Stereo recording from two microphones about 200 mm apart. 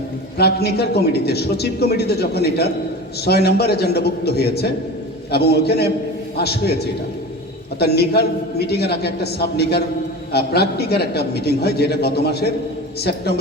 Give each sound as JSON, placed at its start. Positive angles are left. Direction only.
{"t": 0.3, "sound": "a man's voice", "side_deg": 55}